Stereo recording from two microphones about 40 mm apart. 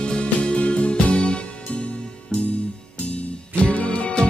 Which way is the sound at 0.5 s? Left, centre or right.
Left.